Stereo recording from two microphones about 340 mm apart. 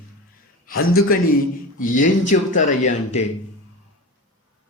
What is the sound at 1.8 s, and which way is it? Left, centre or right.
A man's voice, left.